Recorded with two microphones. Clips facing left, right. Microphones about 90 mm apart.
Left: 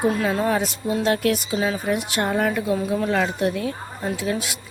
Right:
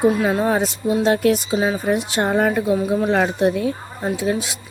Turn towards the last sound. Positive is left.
turn(degrees=-25)  # may be behind; listen again after turning